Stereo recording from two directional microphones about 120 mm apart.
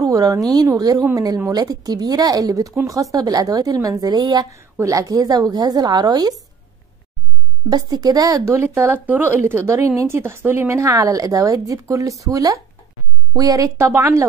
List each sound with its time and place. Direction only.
0.0 s a woman's voice: 30° right (ahead or behind)
7.7 s speech: 35° right (ahead or behind)